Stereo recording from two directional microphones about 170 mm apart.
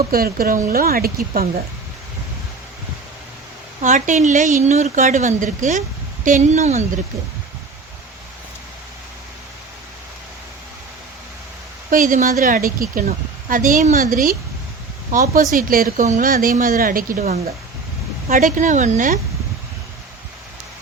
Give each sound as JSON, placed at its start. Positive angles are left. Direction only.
{"t": 0.1, "sound": "a woman's voice", "side_deg": -60}
{"t": 3.8, "sound": "speech", "side_deg": -45}
{"t": 11.9, "sound": "a woman's voice", "side_deg": -55}